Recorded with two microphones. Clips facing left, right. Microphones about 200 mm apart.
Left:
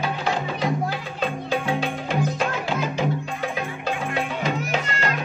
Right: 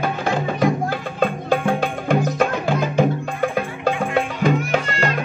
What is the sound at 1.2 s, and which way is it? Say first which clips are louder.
Music: right 6 dB; 55° right (ahead or behind).